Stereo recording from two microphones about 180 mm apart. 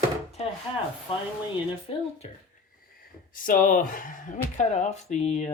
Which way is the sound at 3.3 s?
50° left (ahead or behind).